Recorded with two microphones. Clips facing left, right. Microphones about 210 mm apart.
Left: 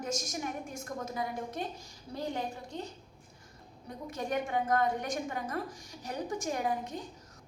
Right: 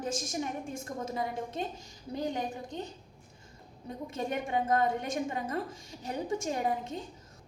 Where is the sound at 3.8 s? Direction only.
25° right (ahead or behind).